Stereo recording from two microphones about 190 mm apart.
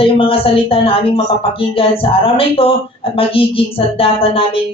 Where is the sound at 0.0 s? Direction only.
30° left (ahead or behind).